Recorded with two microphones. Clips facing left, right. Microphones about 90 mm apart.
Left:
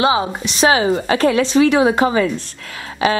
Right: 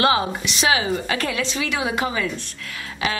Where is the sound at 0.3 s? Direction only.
35° left (ahead or behind).